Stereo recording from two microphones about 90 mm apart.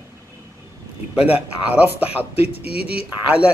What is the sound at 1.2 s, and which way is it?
A man's voice, 15° right (ahead or behind).